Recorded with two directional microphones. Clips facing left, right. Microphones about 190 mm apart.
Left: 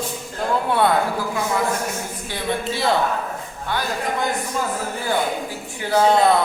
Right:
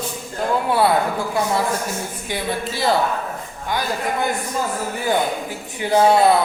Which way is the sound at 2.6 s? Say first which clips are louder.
Right 1 dB; centre (ahead or behind).